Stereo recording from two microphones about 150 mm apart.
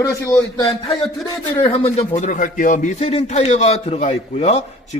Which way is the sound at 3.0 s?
45° left (ahead or behind).